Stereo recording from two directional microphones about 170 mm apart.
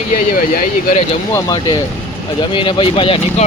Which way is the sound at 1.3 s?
25° left (ahead or behind).